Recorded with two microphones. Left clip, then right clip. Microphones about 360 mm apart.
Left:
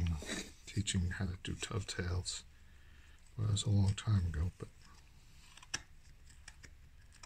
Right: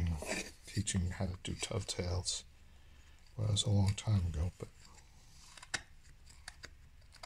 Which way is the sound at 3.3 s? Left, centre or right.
Left.